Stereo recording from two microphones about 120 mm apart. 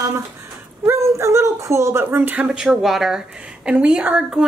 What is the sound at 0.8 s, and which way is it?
Speech, 20° right (ahead or behind).